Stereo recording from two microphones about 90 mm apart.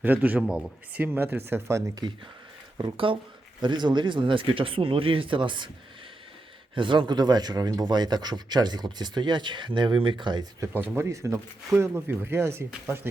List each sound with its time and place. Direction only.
0.0 s speech: 20° right (ahead or behind)
3.1 s speech: 75° right (ahead or behind)
3.6 s speech: 55° right (ahead or behind)
6.7 s speech: 65° right (ahead or behind)
10.8 s speech: 25° right (ahead or behind)